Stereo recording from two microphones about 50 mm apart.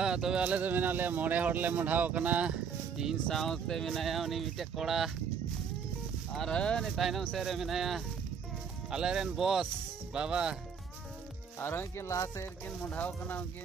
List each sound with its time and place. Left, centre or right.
0.0 s speech: centre
0.4 s speech: right
3.3 s speech: centre
6.3 s speech: centre
6.8 s speech: centre
11.6 s speech: left
12.1 s music: left
12.6 s speech: left